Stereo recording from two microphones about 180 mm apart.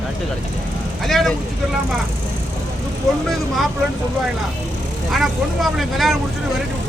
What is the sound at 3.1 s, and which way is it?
Speech, centre (ahead or behind).